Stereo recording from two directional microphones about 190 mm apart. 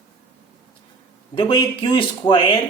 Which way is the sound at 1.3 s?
25° left (ahead or behind).